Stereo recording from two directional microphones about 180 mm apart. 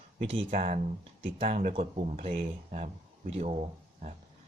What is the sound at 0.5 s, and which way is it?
Speech, 40° right (ahead or behind).